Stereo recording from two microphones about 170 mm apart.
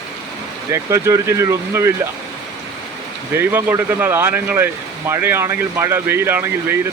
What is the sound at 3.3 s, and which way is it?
Speech, 15° right (ahead or behind).